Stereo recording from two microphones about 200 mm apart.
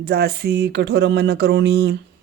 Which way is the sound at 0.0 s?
50° right (ahead or behind).